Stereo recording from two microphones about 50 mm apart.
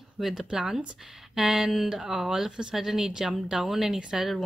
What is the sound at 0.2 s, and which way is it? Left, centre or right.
Speech, centre.